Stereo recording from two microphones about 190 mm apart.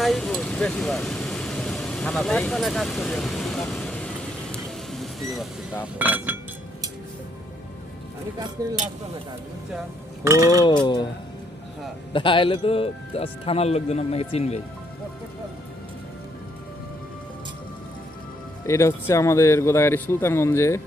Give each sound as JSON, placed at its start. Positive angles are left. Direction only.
{"t": 0.0, "sound": "vehicle", "side_deg": 0}
{"t": 6.0, "sound": "speech", "side_deg": -10}
{"t": 8.6, "sound": "speech", "side_deg": -20}
{"t": 10.2, "sound": "speech", "side_deg": -15}
{"t": 10.6, "sound": "speech", "side_deg": 25}
{"t": 12.1, "sound": "speech", "side_deg": 25}
{"t": 18.6, "sound": "speech", "side_deg": 15}